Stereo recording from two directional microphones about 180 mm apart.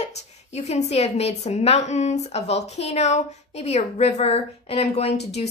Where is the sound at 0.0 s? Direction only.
40° left (ahead or behind).